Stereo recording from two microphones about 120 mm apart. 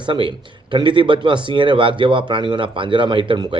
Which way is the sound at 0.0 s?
45° right (ahead or behind).